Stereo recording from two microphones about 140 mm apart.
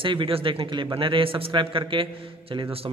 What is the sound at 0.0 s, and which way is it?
A man's voice, 35° right (ahead or behind).